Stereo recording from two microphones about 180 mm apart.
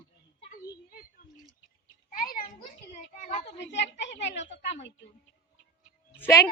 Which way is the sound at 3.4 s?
75° left (ahead or behind).